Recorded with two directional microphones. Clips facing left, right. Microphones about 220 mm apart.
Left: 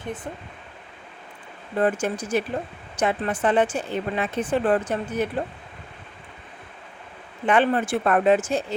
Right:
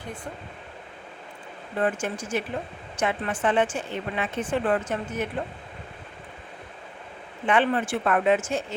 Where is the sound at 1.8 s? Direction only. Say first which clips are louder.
Left 4 dB; 35° left (ahead or behind).